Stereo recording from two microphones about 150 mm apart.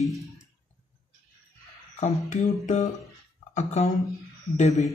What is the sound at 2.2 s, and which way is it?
Speech, 55° left (ahead or behind).